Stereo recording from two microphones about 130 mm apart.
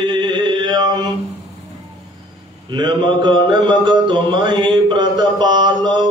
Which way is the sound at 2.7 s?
35° right (ahead or behind).